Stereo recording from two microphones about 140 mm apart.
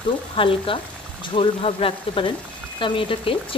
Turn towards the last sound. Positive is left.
turn(degrees=40)  # may be behind; listen again after turning